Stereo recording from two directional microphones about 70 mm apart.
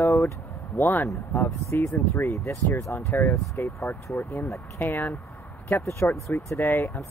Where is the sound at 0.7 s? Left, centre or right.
Left.